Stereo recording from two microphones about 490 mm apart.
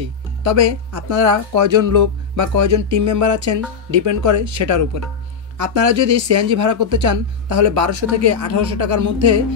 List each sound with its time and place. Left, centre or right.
0.4 s speech: right